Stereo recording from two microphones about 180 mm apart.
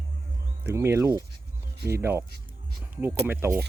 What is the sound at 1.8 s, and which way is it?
Speech, 60° right (ahead or behind).